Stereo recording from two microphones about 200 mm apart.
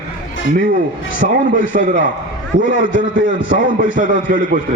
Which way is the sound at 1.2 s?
40° right (ahead or behind).